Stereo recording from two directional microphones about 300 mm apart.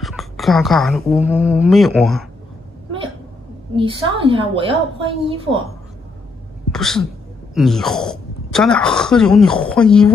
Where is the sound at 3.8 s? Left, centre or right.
Centre.